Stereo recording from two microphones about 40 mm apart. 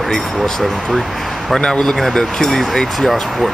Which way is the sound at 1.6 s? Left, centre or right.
Left.